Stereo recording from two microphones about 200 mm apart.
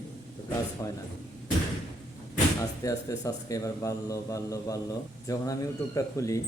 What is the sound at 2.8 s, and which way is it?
A man's voice, 15° left (ahead or behind).